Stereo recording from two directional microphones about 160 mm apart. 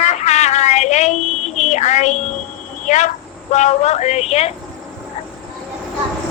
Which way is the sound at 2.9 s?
50° left (ahead or behind).